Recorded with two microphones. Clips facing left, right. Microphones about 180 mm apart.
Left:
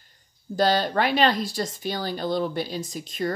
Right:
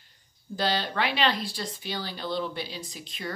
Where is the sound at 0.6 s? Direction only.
45° left (ahead or behind).